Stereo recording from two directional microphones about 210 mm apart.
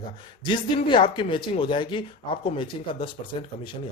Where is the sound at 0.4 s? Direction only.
20° left (ahead or behind).